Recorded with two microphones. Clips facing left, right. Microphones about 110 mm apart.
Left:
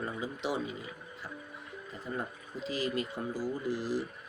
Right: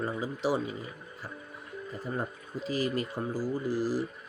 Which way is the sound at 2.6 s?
40° right (ahead or behind).